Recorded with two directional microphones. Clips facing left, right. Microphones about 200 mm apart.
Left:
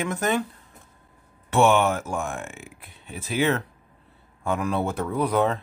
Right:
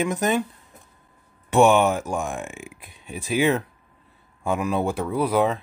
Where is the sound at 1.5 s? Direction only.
15° right (ahead or behind).